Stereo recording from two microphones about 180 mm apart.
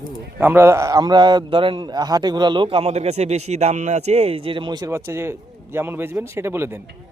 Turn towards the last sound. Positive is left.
turn(degrees=-15)  # may be behind; listen again after turning